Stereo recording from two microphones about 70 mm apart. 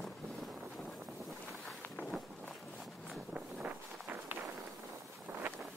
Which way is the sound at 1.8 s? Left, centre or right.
Centre.